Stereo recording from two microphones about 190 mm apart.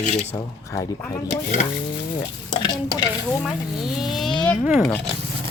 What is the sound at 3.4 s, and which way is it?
Speech, centre (ahead or behind).